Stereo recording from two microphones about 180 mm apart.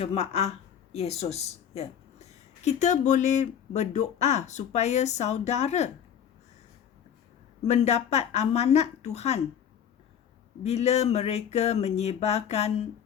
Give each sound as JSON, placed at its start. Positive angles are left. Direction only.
{"t": 0.0, "sound": "a woman's voice", "side_deg": 35}
{"t": 7.7, "sound": "speech", "side_deg": 40}
{"t": 10.6, "sound": "speech", "side_deg": 35}